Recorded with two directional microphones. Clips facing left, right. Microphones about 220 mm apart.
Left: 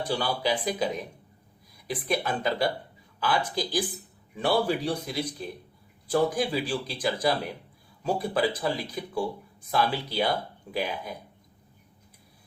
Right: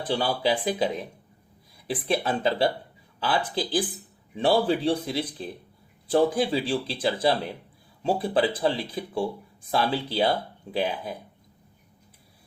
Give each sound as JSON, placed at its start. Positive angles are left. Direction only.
{"t": 0.1, "sound": "speech", "side_deg": -25}
{"t": 2.0, "sound": "speech", "side_deg": -30}